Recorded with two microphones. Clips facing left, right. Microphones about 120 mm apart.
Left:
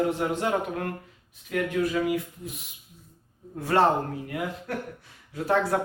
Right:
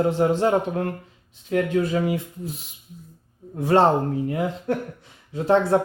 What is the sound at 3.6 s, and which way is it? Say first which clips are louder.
Speech: right 4 dB; 25° right (ahead or behind).